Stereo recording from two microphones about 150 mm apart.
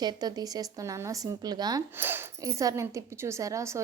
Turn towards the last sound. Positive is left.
turn(degrees=-20)  # may be behind; listen again after turning